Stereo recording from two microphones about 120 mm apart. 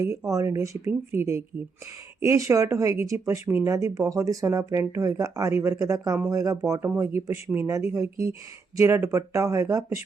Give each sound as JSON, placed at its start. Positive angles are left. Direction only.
{"t": 0.3, "sound": "speech", "side_deg": -25}